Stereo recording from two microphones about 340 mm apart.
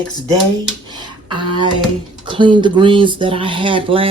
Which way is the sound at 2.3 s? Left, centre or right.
Centre.